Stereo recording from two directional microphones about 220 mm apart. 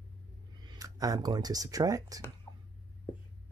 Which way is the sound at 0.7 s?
15° right (ahead or behind).